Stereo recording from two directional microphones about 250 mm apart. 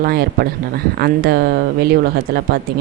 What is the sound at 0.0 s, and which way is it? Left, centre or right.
Speech, right.